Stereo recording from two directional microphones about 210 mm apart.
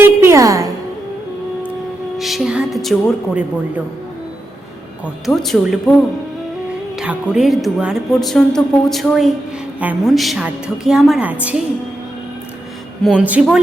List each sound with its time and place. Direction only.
0.2 s music: 15° right (ahead or behind)
2.1 s speech: centre (ahead or behind)
5.2 s speech: centre (ahead or behind)
13.1 s speech: 5° right (ahead or behind)